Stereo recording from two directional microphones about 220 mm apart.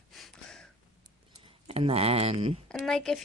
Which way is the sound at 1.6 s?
25° right (ahead or behind).